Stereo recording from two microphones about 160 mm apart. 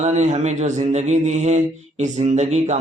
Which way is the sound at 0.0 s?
45° right (ahead or behind).